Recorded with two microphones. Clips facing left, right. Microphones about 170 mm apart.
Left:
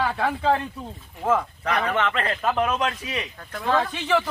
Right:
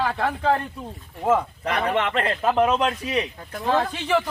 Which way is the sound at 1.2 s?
15° right (ahead or behind).